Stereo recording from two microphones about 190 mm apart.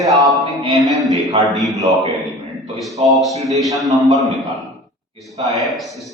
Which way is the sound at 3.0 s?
30° right (ahead or behind).